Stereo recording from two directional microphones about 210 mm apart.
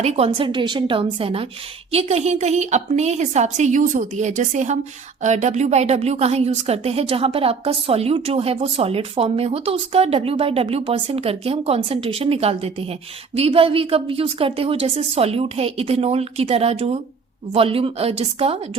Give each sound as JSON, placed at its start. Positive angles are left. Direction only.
{"t": 0.0, "sound": "a woman's voice", "side_deg": -30}